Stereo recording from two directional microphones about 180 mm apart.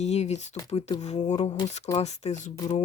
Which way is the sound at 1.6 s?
40° left (ahead or behind).